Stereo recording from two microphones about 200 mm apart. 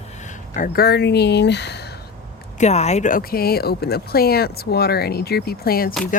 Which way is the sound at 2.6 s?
35° left (ahead or behind).